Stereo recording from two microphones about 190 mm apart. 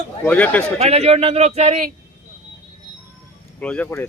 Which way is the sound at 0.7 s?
35° right (ahead or behind).